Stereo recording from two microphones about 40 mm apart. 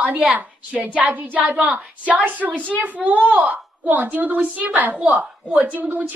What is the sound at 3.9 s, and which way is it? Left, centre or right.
A woman's voice, right.